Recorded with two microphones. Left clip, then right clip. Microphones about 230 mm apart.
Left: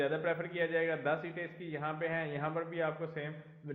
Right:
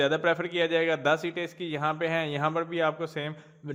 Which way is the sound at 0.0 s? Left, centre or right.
Right.